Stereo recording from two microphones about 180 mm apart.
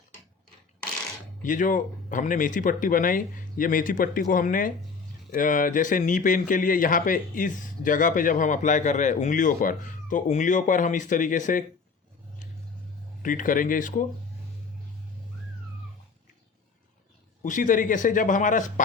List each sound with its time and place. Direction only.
1.5 s a man's voice: 45° left (ahead or behind)
13.2 s a man's voice: 50° left (ahead or behind)
17.4 s a man's voice: 45° left (ahead or behind)